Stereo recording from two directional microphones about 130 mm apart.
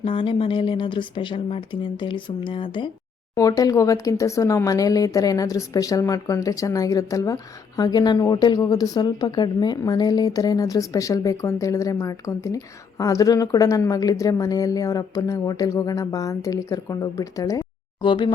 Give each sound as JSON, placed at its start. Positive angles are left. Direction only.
{"t": 0.0, "sound": "speech", "side_deg": 40}
{"t": 3.3, "sound": "speech", "side_deg": 25}